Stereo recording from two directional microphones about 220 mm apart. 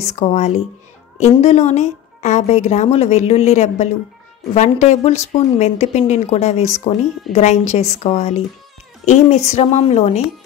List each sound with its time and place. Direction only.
0.0 s a woman's voice: 30° left (ahead or behind)